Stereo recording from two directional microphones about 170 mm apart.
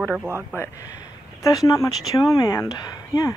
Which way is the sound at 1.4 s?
20° left (ahead or behind).